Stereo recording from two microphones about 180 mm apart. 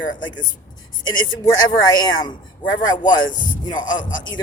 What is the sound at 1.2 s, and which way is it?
Speech, 20° left (ahead or behind).